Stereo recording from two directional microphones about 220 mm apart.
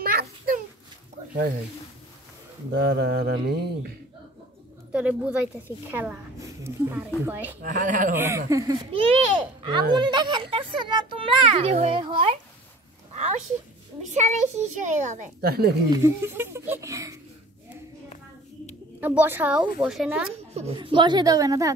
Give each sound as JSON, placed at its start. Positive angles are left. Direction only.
{"t": 0.0, "sound": "a sound", "side_deg": -40}
{"t": 2.7, "sound": "mantra", "side_deg": -50}
{"t": 4.9, "sound": "a woman's voice", "side_deg": -5}
{"t": 7.6, "sound": "a child's voice", "side_deg": -35}
{"t": 8.5, "sound": "a child's voice", "side_deg": -15}
{"t": 14.1, "sound": "a child's voice", "side_deg": -35}
{"t": 15.9, "sound": "speech", "side_deg": -15}
{"t": 18.9, "sound": "speech", "side_deg": -10}
{"t": 20.5, "sound": "a child's voice", "side_deg": -25}